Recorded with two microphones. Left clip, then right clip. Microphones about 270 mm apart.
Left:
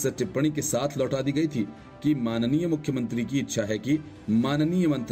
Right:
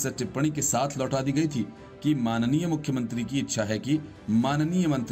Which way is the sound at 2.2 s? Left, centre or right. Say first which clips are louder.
Left 1 dB; centre.